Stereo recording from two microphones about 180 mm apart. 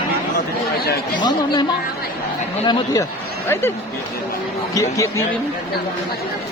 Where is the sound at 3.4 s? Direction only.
15° left (ahead or behind).